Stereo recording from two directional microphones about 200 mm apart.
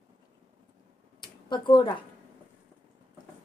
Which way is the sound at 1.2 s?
20° left (ahead or behind).